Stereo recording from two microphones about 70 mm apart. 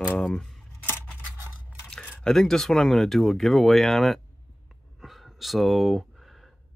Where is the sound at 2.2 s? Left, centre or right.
Centre.